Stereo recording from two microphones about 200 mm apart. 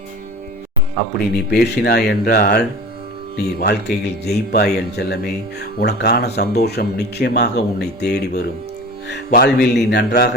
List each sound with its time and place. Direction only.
1.5 s speech: 55° left (ahead or behind)